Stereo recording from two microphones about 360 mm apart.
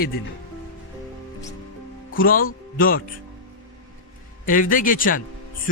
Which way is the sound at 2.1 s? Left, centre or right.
Left.